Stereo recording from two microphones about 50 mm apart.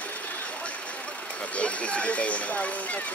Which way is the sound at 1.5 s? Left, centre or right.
Left.